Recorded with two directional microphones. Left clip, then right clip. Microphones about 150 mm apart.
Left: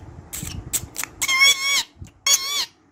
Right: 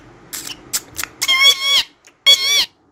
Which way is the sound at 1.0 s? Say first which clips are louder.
Right 4 dB; 5° right (ahead or behind).